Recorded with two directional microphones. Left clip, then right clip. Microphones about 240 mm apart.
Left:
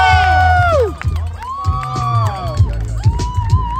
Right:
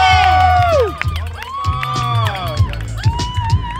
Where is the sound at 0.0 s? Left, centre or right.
Right.